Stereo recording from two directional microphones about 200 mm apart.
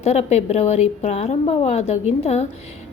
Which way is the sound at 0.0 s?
35° left (ahead or behind).